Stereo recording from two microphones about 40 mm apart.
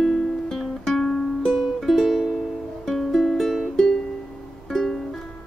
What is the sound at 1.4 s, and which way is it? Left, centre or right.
Music, centre.